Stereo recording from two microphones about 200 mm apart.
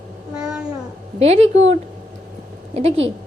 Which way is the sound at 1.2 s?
30° right (ahead or behind).